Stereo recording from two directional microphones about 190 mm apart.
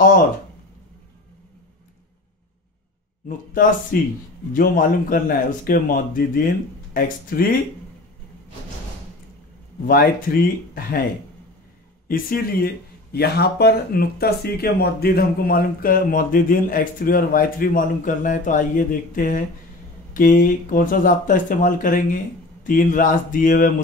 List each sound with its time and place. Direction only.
3.9 s speech: 50° left (ahead or behind)
9.8 s speech: 50° left (ahead or behind)
12.1 s speech: 50° left (ahead or behind)